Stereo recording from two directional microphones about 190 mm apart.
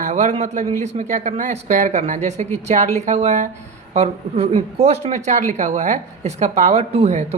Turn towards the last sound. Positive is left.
turn(degrees=-35)  # may be behind; listen again after turning